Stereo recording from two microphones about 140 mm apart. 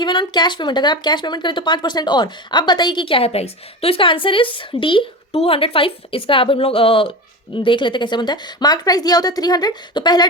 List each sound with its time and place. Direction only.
0.0 s a woman's voice: 35° left (ahead or behind)